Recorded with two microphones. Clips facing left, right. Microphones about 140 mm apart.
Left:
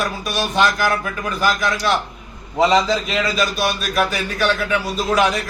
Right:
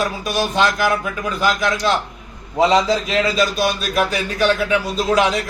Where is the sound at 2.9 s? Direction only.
25° right (ahead or behind).